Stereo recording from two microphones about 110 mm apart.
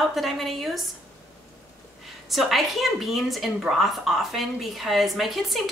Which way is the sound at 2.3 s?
Centre (ahead or behind).